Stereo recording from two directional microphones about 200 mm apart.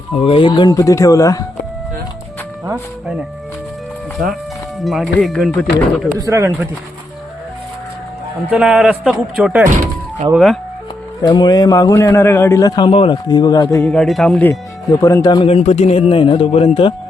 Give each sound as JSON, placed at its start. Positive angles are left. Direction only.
{"t": 0.1, "sound": "speech", "side_deg": 30}
{"t": 2.6, "sound": "speech", "side_deg": -5}
{"t": 4.8, "sound": "speech", "side_deg": 0}
{"t": 6.1, "sound": "speech", "side_deg": -15}
{"t": 8.4, "sound": "speech", "side_deg": -5}
{"t": 9.6, "sound": "thunk", "side_deg": -40}
{"t": 10.3, "sound": "speech", "side_deg": 0}
{"t": 11.2, "sound": "a man's voice", "side_deg": 20}
{"t": 13.8, "sound": "speech", "side_deg": 0}
{"t": 15.0, "sound": "a man's voice", "side_deg": 20}